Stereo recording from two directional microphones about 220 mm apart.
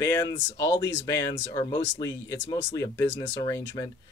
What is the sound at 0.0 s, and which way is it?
Speech, 15° left (ahead or behind).